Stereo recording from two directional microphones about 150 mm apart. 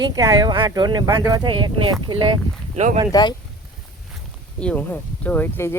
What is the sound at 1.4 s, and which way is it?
Speech, 35° right (ahead or behind).